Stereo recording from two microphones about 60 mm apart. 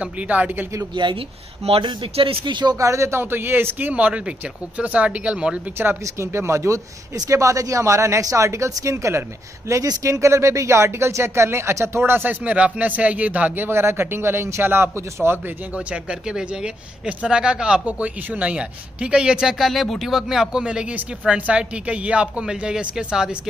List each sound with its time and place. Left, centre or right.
0.0 s a woman's voice: right
2.7 s a man's voice: right; by 5.6 s centre
5.8 s speech: right
12.4 s a woman's voice: centre
13.7 s a man's voice: right
15.7 s a woman's voice: centre
19.7 s speech: centre